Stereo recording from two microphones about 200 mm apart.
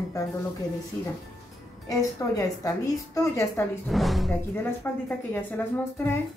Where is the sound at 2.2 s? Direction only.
15° left (ahead or behind).